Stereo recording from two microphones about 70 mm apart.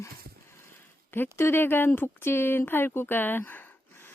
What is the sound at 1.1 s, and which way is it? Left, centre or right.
Speech, left.